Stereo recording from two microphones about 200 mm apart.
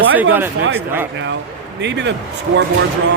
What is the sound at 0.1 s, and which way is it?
Speech, 10° right (ahead or behind).